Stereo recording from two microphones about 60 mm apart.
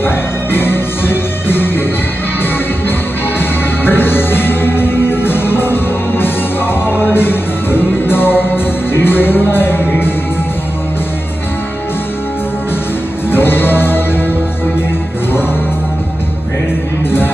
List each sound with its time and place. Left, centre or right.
0.0 s music: left
3.3 s music: left
6.9 s music: right
7.2 s music: left
13.3 s music: left